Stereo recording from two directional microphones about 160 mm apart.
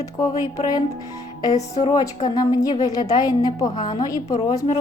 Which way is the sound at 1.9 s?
25° left (ahead or behind).